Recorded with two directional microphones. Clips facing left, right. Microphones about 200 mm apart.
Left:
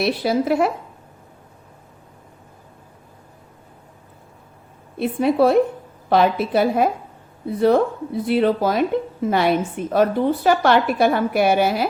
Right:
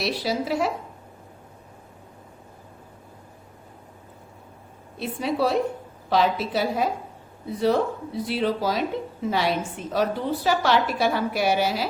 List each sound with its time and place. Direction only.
0.0 s a woman's voice: 55° left (ahead or behind)
4.9 s a woman's voice: 55° left (ahead or behind)